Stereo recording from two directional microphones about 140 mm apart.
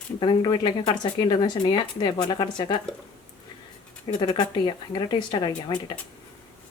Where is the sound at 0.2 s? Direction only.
35° left (ahead or behind).